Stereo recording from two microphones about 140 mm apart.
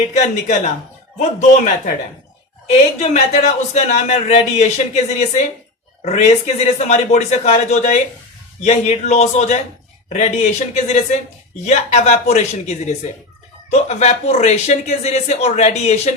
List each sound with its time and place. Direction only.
0.1 s speech: 55° left (ahead or behind)
6.0 s speech: 55° left (ahead or behind)